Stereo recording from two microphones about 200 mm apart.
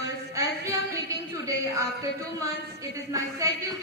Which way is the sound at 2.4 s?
15° right (ahead or behind).